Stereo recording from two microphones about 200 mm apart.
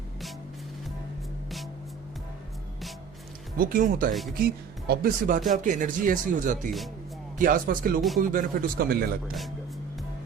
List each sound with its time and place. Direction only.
3.6 s speech: 45° right (ahead or behind)